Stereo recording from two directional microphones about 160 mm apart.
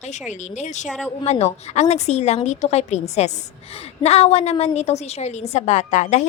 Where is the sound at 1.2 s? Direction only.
40° left (ahead or behind).